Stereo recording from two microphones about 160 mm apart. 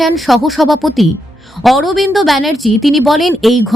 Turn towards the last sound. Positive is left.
turn(degrees=0)  # may be behind; listen again after turning